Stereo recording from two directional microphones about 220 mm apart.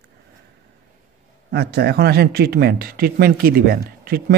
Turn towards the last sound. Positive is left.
turn(degrees=-45)  # may be behind; listen again after turning